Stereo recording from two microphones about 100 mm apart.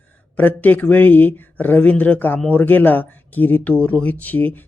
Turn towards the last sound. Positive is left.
turn(degrees=15)  # may be behind; listen again after turning